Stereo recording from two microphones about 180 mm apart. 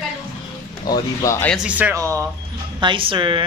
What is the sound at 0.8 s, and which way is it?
Speech, 20° left (ahead or behind).